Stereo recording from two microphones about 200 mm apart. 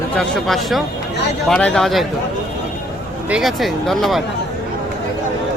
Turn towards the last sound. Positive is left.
turn(degrees=0)  # may be behind; listen again after turning